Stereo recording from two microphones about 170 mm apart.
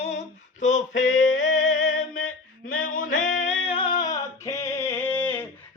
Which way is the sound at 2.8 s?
55° left (ahead or behind).